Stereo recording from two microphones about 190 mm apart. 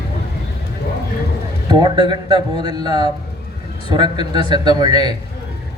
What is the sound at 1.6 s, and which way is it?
Speech, 20° right (ahead or behind).